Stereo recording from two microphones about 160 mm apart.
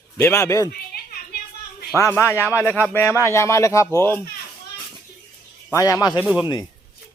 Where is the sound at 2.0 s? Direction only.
15° left (ahead or behind).